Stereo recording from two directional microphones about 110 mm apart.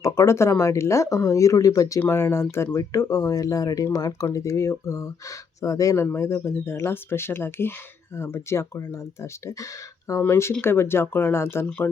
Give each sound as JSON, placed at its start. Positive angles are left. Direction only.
{"t": 0.0, "sound": "speech", "side_deg": 25}